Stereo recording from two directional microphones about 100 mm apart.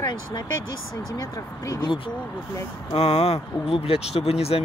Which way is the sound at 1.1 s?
35° left (ahead or behind).